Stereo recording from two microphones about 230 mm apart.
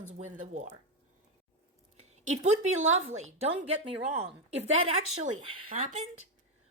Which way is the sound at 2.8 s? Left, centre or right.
Right.